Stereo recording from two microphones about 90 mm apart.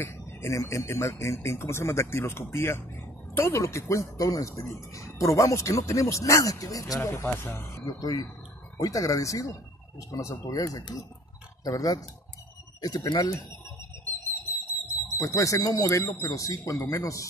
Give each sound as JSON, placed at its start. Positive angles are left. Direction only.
{"t": 0.0, "sound": "speech", "side_deg": 30}
{"t": 7.2, "sound": "speech", "side_deg": 25}
{"t": 15.0, "sound": "speech", "side_deg": 35}